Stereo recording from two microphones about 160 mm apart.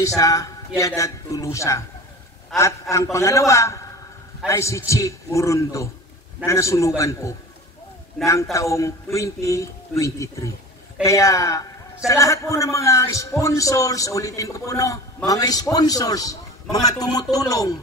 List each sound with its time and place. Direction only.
0.0 s a man's voice: 20° left (ahead or behind)